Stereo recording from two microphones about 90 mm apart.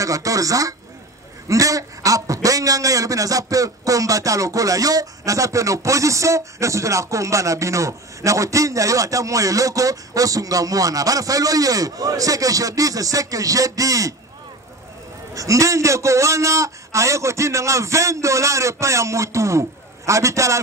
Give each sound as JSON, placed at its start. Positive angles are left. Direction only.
{"t": 0.0, "sound": "a man's voice", "side_deg": -40}
{"t": 15.3, "sound": "a man's voice", "side_deg": -35}